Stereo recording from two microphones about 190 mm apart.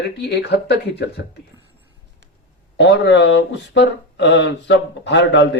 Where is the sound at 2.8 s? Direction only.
60° left (ahead or behind).